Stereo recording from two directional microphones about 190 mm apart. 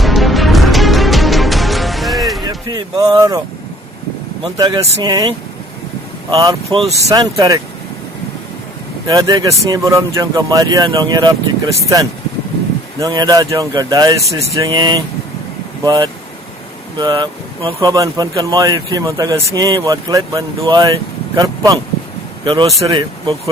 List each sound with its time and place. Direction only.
0.0 s music: centre (ahead or behind)
2.4 s speech: 20° right (ahead or behind)
4.5 s speech: 20° right (ahead or behind)
6.3 s speech: 20° right (ahead or behind)
9.0 s a man's voice: 20° right (ahead or behind)